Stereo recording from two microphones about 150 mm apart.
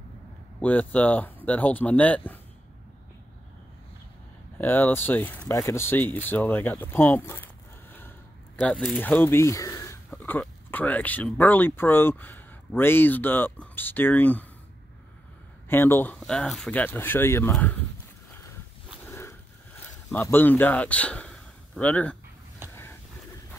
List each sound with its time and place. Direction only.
0.6 s speech: 10° left (ahead or behind)
4.6 s speech: 10° left (ahead or behind)
8.5 s speech: 5° left (ahead or behind)
10.1 s speech: 10° left (ahead or behind)
15.7 s speech: 15° left (ahead or behind)
16.2 s speech: 5° left (ahead or behind)
19.0 s a sound: 15° left (ahead or behind)
20.1 s a man's voice: 15° left (ahead or behind)
22.6 s a sound: 15° right (ahead or behind)